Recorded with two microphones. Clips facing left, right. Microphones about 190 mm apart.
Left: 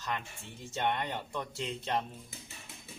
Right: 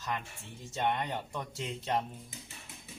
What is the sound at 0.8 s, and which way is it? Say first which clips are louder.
Speech: right 1 dB; 10° right (ahead or behind).